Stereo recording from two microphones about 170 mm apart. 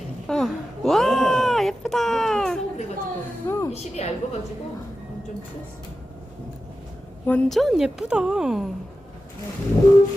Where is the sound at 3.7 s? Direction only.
40° left (ahead or behind).